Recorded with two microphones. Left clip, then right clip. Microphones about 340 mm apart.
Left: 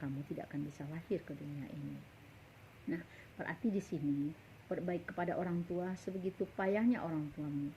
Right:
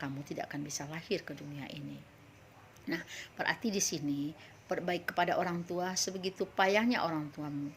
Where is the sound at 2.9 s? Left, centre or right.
Right.